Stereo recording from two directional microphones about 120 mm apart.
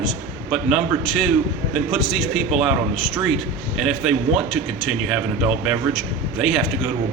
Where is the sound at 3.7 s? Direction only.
5° right (ahead or behind).